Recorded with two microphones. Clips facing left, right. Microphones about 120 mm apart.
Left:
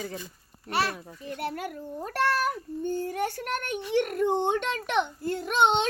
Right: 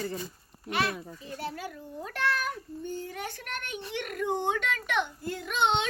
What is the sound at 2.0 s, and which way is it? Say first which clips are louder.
A child's voice: left 5 dB; 45° left (ahead or behind).